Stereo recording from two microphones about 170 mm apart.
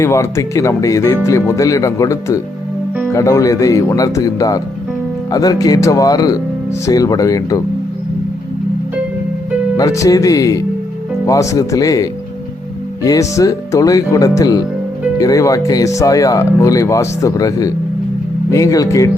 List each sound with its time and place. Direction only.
0.0 s speech: 15° left (ahead or behind)
9.7 s speech: 20° left (ahead or behind)